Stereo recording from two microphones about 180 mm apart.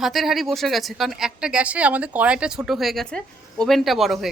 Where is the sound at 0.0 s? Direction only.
Centre (ahead or behind).